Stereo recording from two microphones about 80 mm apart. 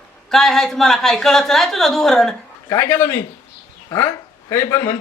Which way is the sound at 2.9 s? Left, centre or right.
Left.